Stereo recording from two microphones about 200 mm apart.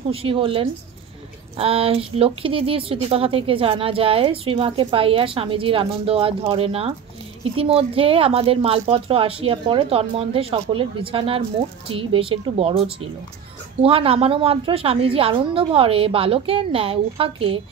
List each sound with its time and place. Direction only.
0.1 s speech: 25° right (ahead or behind)